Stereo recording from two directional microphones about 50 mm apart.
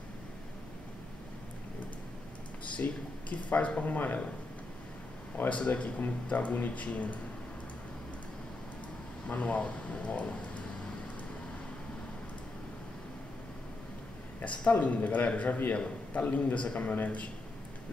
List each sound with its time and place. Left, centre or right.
2.7 s speech: left
5.5 s speech: left
9.3 s speech: left
14.4 s a man's voice: left